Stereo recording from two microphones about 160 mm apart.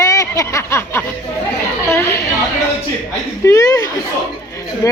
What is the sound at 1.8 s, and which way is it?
Chatter, 15° left (ahead or behind).